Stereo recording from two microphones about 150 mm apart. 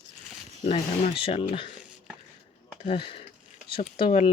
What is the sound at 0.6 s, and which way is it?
Speech, 45° left (ahead or behind).